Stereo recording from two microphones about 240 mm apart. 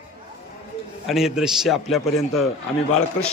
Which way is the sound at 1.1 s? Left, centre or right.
Centre.